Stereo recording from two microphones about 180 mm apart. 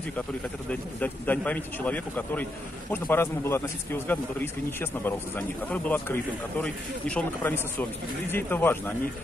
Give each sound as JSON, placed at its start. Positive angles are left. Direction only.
{"t": 0.7, "sound": "speech", "side_deg": 10}